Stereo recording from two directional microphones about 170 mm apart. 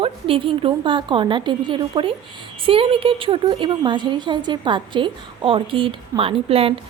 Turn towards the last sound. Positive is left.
turn(degrees=-35)  # may be behind; listen again after turning